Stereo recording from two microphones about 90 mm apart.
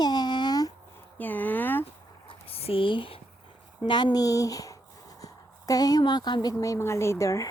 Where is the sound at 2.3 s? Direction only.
90° left; by 3.1 s 70° left (ahead or behind).